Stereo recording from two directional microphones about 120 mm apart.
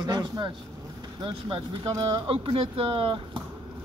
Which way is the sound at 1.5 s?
40° right (ahead or behind).